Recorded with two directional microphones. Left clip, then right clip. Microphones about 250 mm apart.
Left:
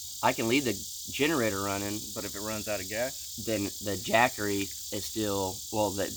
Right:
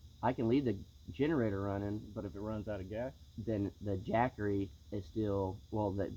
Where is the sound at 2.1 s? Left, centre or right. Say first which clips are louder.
Left 7 dB; centre.